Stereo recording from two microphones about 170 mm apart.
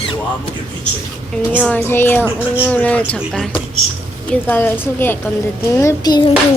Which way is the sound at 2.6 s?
10° left (ahead or behind).